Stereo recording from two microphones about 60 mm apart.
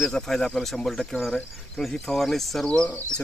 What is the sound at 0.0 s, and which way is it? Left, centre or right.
Speech, centre.